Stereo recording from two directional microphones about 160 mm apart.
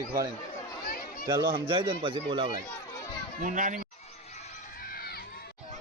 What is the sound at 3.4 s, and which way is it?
Speech, 55° right (ahead or behind).